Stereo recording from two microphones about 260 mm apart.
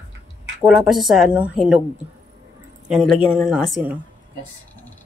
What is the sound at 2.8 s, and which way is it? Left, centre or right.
A woman's voice, centre.